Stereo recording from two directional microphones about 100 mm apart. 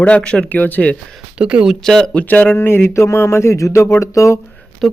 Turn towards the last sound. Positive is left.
turn(degrees=0)  # may be behind; listen again after turning